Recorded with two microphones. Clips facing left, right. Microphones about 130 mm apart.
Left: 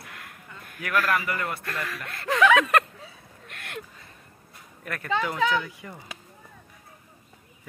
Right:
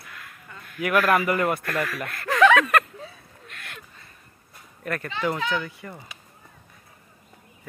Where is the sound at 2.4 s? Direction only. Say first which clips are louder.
Right 3 dB; 10° left (ahead or behind).